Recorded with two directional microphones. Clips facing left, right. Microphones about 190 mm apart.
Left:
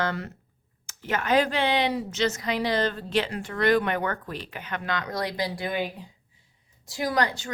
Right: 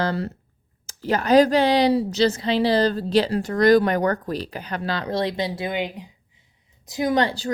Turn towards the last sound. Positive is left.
turn(degrees=-30)  # may be behind; listen again after turning